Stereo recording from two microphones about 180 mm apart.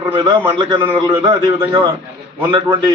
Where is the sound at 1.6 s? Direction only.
20° right (ahead or behind).